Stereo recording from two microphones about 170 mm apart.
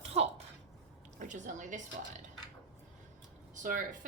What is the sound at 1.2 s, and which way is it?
Speech, 50° right (ahead or behind).